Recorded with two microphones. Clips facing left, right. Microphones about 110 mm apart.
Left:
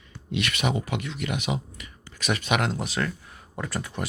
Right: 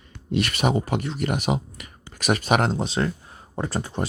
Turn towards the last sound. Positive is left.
turn(degrees=-30)  # may be behind; listen again after turning